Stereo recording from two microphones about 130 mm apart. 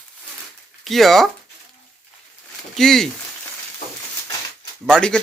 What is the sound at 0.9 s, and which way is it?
Speech, centre (ahead or behind).